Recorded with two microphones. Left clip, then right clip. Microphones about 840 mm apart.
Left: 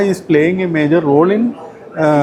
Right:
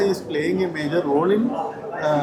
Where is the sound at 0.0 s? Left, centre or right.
Left.